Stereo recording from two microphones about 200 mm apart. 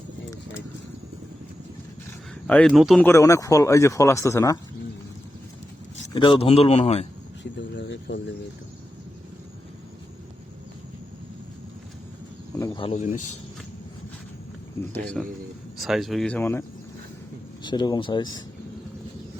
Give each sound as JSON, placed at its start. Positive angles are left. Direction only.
{"t": 2.5, "sound": "speech", "side_deg": 5}
{"t": 3.1, "sound": "speech", "side_deg": 15}
{"t": 6.1, "sound": "speech", "side_deg": 25}
{"t": 7.8, "sound": "a sound", "side_deg": 60}
{"t": 12.5, "sound": "speech", "side_deg": 20}
{"t": 14.9, "sound": "speech", "side_deg": 5}
{"t": 17.6, "sound": "speech", "side_deg": 20}